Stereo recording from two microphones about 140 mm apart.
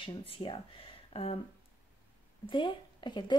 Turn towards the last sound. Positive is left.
turn(degrees=35)  # may be behind; listen again after turning